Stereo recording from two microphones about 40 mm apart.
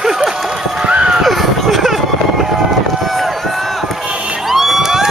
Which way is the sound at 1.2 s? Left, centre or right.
Centre.